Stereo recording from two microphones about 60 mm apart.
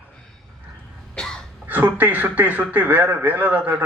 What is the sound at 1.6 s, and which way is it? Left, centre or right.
Speech, right.